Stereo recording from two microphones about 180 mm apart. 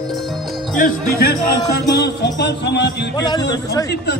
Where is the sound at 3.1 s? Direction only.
25° left (ahead or behind).